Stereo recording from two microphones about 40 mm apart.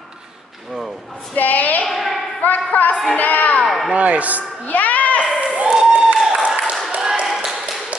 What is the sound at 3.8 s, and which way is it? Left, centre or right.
Speech, right.